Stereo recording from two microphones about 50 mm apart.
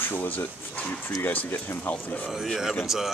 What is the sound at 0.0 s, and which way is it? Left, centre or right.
Speech, left.